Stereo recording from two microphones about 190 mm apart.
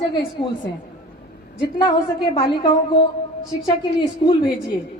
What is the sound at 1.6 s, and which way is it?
Speech, 25° left (ahead or behind).